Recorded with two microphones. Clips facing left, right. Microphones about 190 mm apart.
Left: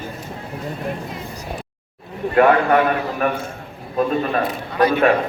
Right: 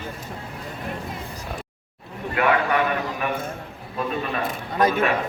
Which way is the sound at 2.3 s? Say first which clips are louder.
Left 7 dB; 45° left (ahead or behind).